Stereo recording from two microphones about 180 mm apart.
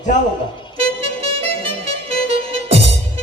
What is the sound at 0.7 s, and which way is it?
Music, 30° right (ahead or behind).